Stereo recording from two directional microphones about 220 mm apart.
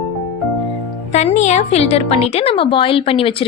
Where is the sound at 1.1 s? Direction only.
30° left (ahead or behind).